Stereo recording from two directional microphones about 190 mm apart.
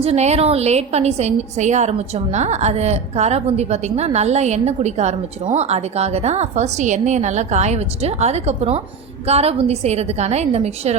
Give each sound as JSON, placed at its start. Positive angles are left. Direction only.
{"t": 0.0, "sound": "a woman's voice", "side_deg": -35}